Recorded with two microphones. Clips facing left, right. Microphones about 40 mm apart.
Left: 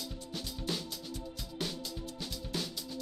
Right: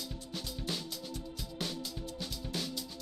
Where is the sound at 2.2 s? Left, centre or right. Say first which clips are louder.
Left 1 dB; centre.